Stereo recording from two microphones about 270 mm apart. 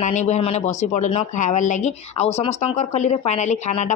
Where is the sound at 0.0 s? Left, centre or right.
Left.